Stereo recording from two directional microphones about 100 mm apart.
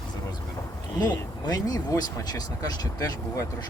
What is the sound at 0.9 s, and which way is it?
A man's voice, 40° left (ahead or behind).